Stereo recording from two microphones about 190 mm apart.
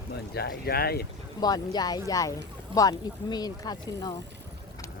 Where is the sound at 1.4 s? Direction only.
20° left (ahead or behind).